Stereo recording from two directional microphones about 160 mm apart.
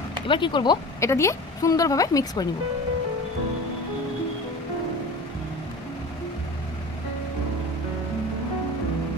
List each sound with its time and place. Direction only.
0.3 s speech: 30° left (ahead or behind)
1.0 s speech: 20° left (ahead or behind)